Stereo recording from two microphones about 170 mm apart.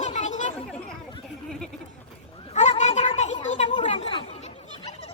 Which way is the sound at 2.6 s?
40° left (ahead or behind).